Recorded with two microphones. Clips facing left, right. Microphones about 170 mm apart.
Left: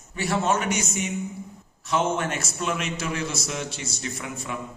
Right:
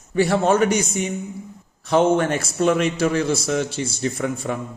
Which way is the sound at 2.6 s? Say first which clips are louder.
Right 11 dB; 50° right (ahead or behind).